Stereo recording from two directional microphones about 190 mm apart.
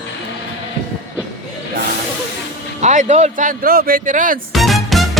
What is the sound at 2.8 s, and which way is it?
Speech, 35° right (ahead or behind).